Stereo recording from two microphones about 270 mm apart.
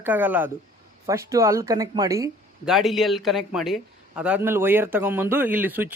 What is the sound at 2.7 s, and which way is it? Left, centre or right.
A man's voice, centre.